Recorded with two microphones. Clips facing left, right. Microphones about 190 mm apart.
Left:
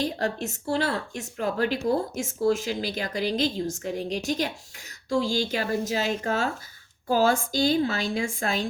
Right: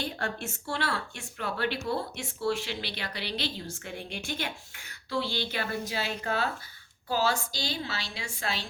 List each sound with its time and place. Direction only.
0.0 s a woman's voice: 35° left (ahead or behind)